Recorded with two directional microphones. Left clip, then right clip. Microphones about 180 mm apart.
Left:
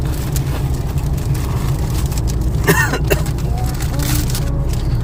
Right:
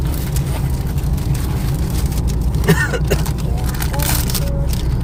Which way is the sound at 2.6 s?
55° left (ahead or behind).